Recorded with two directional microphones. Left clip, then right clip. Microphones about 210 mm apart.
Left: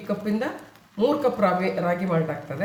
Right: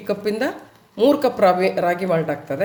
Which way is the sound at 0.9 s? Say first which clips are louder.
Right 5 dB; 40° right (ahead or behind).